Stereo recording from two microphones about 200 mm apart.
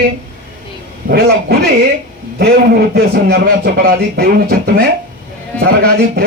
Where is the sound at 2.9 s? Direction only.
50° right (ahead or behind).